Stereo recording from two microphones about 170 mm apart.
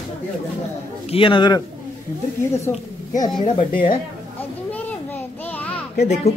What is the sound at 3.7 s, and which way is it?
Speech, 30° left (ahead or behind).